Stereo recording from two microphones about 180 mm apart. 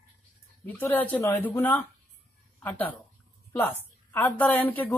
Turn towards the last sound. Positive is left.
turn(degrees=10)  # may be behind; listen again after turning